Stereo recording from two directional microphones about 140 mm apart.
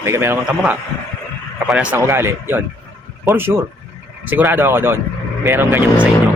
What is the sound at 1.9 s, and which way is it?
Speech, 15° right (ahead or behind).